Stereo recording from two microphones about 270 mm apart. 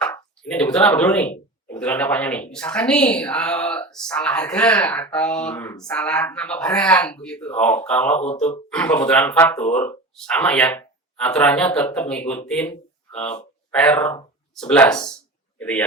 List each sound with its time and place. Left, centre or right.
0.0 s speech: centre